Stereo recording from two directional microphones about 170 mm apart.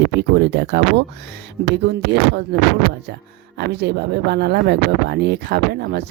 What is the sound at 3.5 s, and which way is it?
Speech, 80° right.